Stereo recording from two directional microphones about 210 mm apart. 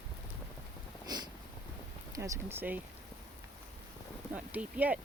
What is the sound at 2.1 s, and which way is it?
Speech, 15° right (ahead or behind).